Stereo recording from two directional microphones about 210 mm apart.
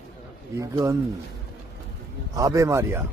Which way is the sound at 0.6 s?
15° right (ahead or behind).